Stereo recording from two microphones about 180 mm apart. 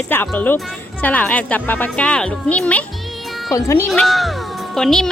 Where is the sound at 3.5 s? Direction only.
15° left (ahead or behind).